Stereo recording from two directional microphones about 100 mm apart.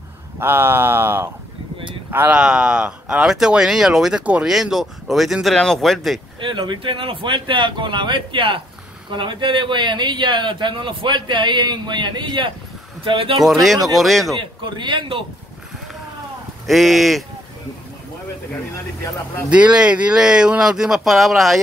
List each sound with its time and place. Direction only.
0.4 s speech: 20° right (ahead or behind)
4.5 s speech: 5° right (ahead or behind)
6.4 s speech: 50° right (ahead or behind)
13.4 s speech: centre (ahead or behind)
14.4 s speech: 55° right (ahead or behind)
16.6 s speech: centre (ahead or behind)
19.5 s speech: 10° right (ahead or behind)